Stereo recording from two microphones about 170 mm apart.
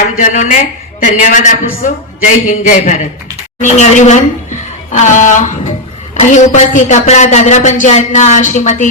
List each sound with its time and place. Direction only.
0.2 s a woman's voice: 50° left (ahead or behind)